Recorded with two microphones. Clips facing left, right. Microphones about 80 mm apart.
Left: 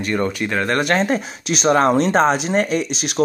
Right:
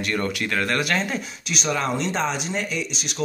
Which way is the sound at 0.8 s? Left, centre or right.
Left.